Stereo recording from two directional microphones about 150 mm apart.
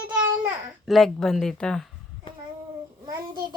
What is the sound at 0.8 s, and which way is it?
Speech, centre (ahead or behind).